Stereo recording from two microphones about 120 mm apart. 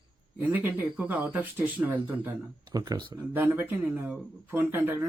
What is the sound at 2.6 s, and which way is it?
Speech, 35° right (ahead or behind).